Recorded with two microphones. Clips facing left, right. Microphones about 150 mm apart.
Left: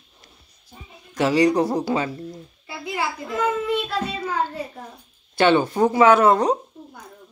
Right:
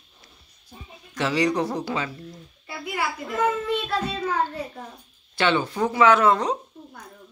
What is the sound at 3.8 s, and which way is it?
A child's voice, 10° left (ahead or behind).